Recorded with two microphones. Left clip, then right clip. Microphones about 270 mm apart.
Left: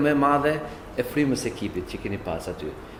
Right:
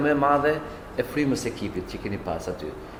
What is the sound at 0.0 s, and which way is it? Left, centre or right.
Speech, left.